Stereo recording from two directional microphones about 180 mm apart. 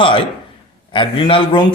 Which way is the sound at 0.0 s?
30° left (ahead or behind).